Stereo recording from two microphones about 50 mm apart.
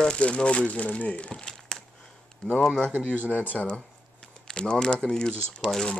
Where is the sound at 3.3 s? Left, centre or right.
Left.